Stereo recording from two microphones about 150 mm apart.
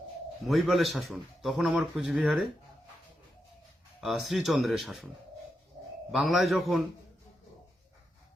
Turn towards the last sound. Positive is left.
turn(degrees=0)  # may be behind; listen again after turning